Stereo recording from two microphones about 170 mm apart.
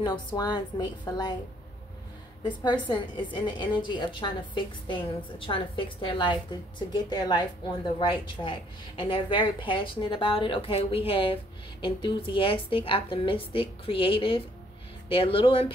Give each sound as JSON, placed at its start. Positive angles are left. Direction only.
{"t": 0.0, "sound": "a woman's voice", "side_deg": 25}
{"t": 2.4, "sound": "a woman's voice", "side_deg": 25}